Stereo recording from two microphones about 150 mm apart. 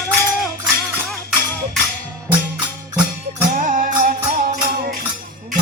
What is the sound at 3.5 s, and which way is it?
Music, 65° right (ahead or behind).